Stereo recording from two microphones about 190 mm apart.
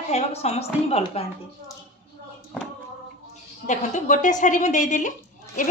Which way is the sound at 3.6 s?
40° left (ahead or behind).